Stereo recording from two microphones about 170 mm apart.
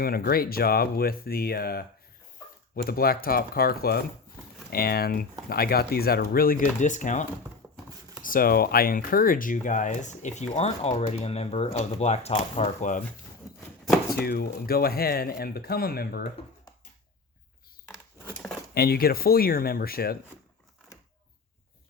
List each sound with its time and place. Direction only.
0.0 s speech: 65° left (ahead or behind); by 7.3 s 45° left (ahead or behind)
7.6 s clip-clop: 15° right (ahead or behind)
8.2 s speech: 55° left (ahead or behind); by 12.9 s 35° left (ahead or behind)
14.2 s speech: 60° left (ahead or behind)
18.7 s speech: 65° left (ahead or behind)